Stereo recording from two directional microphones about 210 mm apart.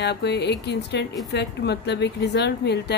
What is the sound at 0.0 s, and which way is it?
A woman's voice, 50° left (ahead or behind).